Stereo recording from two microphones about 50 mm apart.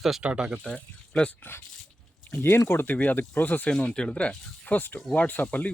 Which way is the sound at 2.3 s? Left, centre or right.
Left.